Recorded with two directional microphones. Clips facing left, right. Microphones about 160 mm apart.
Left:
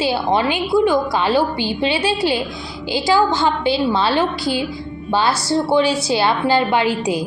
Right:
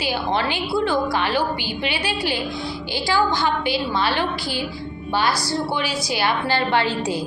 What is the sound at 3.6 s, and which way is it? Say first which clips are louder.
Speech: left 5 dB; 25° left (ahead or behind).